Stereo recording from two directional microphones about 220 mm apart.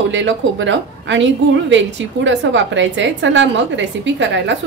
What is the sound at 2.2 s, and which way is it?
A woman's voice, 55° right (ahead or behind).